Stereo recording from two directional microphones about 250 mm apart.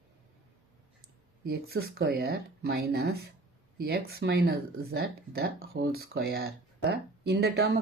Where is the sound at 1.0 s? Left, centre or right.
Right.